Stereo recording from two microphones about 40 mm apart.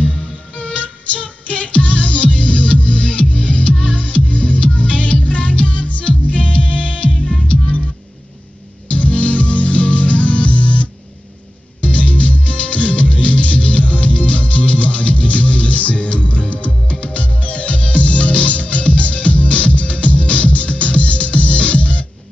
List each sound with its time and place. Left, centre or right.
0.6 s music: left
8.8 s music: left